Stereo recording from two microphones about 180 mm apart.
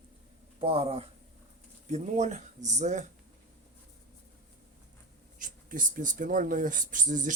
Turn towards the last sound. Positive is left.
turn(degrees=-45)  # may be behind; listen again after turning